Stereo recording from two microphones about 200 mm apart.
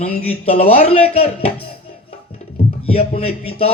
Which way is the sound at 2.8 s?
30° left (ahead or behind).